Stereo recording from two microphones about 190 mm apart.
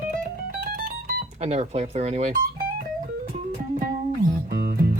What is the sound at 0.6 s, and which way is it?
Music, 45° right (ahead or behind).